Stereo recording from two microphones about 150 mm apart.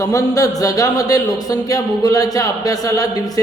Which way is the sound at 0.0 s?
20° left (ahead or behind).